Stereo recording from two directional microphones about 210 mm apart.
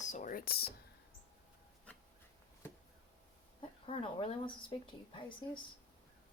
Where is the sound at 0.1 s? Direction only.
40° left (ahead or behind).